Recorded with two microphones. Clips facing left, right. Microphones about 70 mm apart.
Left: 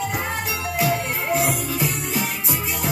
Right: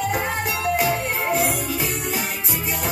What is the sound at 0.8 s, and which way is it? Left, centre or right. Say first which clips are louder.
Music: even; right.